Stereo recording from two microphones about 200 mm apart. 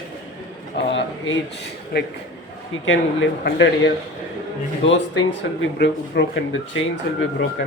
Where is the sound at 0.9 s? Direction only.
70° left (ahead or behind).